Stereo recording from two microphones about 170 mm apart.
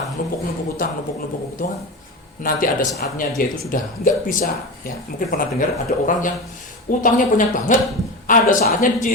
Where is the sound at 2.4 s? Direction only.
55° left (ahead or behind).